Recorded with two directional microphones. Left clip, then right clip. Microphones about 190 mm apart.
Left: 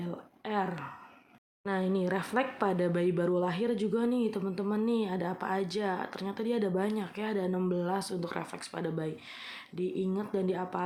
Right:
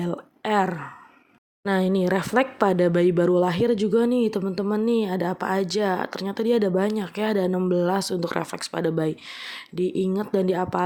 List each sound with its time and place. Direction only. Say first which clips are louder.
0.0 s speech: right 11 dB; 55° right (ahead or behind)